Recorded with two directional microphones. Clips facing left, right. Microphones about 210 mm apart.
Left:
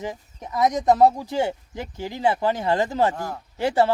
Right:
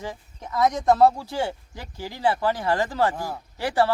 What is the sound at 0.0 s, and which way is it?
Speech, 20° left (ahead or behind).